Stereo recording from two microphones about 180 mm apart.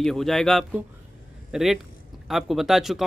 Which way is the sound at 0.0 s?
Centre (ahead or behind).